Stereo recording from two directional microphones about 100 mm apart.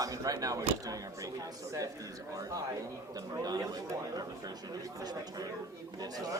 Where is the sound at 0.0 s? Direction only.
35° right (ahead or behind).